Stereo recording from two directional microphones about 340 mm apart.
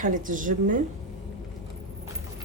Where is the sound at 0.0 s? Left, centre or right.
Right.